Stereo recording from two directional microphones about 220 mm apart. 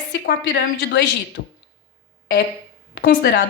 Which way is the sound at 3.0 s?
45° left (ahead or behind).